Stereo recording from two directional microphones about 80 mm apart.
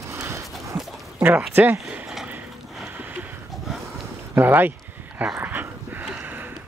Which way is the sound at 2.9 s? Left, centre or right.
Centre.